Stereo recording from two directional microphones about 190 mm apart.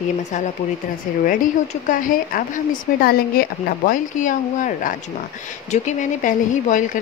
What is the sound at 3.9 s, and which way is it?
Speech, 40° left (ahead or behind).